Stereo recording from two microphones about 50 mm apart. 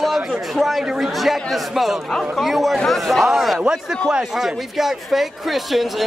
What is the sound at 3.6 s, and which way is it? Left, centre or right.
A man's voice, centre.